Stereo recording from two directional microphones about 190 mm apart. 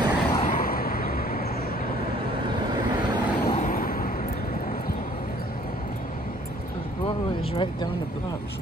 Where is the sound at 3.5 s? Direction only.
45° left (ahead or behind).